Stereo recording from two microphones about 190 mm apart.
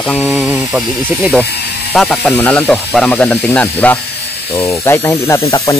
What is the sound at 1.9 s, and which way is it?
Speech, 5° left (ahead or behind).